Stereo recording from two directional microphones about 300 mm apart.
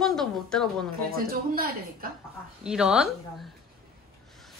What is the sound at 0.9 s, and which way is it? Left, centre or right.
Speech, right.